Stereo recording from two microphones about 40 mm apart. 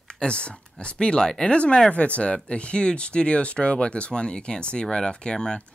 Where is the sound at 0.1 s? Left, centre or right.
Left.